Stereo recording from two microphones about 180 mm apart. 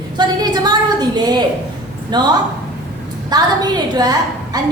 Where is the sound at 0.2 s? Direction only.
25° right (ahead or behind).